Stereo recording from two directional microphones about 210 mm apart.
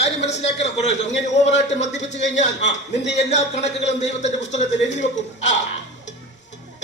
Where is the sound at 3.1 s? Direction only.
30° left (ahead or behind).